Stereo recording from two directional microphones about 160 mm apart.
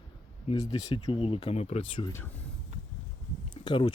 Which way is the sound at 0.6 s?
25° left (ahead or behind).